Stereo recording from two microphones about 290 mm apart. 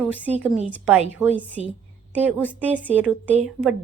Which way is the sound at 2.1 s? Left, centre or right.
Centre.